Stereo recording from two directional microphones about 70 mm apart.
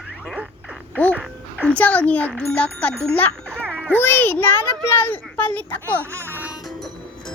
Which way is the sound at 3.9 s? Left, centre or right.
Left.